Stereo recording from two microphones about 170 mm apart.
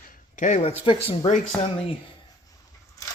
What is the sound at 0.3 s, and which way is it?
Speech, 45° left (ahead or behind).